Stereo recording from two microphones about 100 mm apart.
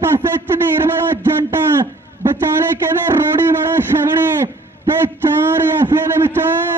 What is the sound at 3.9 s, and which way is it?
Speech, 50° right (ahead or behind).